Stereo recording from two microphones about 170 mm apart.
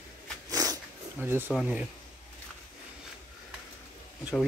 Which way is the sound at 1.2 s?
10° right (ahead or behind).